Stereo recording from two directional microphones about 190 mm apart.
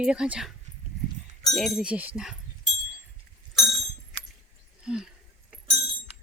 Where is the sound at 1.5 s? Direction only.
Centre (ahead or behind).